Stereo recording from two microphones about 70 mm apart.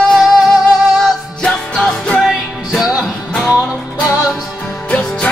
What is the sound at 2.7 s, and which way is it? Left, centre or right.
Music, centre.